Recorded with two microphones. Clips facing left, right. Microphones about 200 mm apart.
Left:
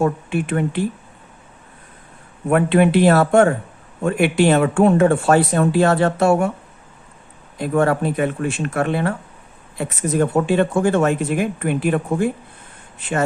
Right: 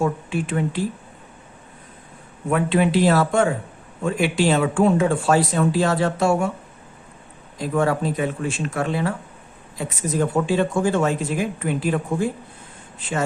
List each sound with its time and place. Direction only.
0.0 s speech: 60° left (ahead or behind)
2.5 s speech: 60° left (ahead or behind)
7.6 s speech: 60° left (ahead or behind)